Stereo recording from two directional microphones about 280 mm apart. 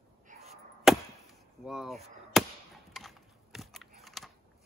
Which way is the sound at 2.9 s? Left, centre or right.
Centre.